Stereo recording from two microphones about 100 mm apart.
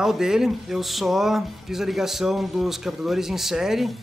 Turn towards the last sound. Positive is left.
turn(degrees=-5)  # may be behind; listen again after turning